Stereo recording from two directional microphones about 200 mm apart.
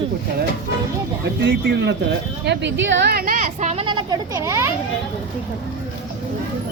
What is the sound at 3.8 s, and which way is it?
Speech, 20° right (ahead or behind).